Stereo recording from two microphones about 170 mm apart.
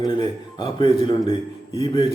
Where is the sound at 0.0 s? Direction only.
25° left (ahead or behind).